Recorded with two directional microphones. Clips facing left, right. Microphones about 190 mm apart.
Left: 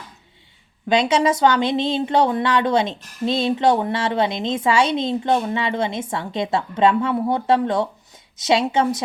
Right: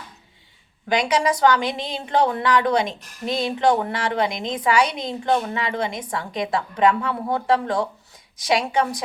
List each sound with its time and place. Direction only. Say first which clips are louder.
0.9 s speech: left 3 dB; 25° left (ahead or behind)